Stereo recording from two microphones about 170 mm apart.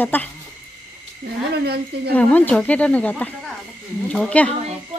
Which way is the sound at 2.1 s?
10° left (ahead or behind).